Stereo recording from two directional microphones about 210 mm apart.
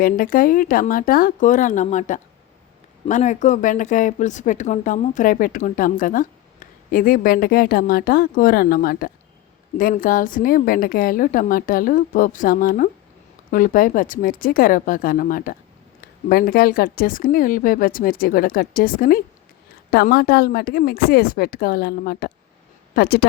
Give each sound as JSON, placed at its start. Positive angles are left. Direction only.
{"t": 0.0, "sound": "a woman's voice", "side_deg": 40}